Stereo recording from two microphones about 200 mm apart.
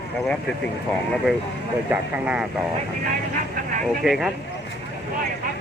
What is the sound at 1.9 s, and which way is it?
Speech, 5° right (ahead or behind).